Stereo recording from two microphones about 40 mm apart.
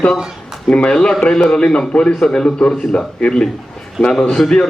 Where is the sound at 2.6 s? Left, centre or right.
Left.